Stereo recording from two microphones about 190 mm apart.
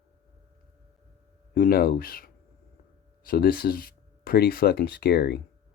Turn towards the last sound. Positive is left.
turn(degrees=60)  # may be behind; listen again after turning